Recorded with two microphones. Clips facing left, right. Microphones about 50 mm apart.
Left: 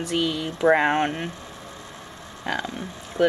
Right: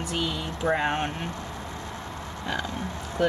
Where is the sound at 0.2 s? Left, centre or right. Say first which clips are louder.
Left 5 dB; left.